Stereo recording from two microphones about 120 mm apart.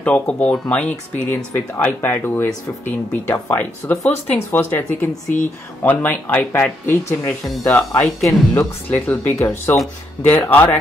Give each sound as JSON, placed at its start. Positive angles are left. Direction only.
{"t": 0.0, "sound": "speech", "side_deg": 10}
{"t": 7.4, "sound": "speech", "side_deg": 0}
{"t": 8.2, "sound": "speech", "side_deg": 25}
{"t": 8.8, "sound": "speech", "side_deg": 15}